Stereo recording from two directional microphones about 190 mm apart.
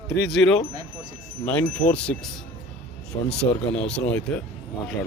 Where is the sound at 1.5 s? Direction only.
10° left (ahead or behind).